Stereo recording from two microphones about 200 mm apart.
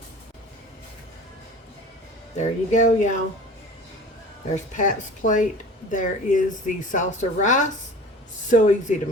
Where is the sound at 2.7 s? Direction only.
35° left (ahead or behind).